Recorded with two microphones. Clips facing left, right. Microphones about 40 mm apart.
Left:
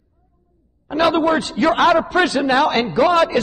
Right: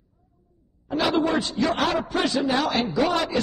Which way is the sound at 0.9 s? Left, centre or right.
Left.